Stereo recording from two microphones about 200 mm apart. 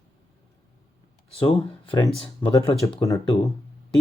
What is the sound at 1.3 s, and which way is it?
Speech, 25° left (ahead or behind).